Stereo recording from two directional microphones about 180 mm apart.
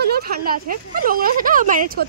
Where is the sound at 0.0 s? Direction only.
55° right (ahead or behind).